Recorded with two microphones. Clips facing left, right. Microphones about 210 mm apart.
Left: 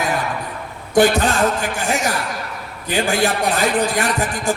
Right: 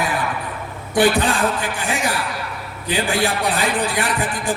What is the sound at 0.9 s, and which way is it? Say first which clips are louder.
Speech: left 2 dB; 45° left (ahead or behind).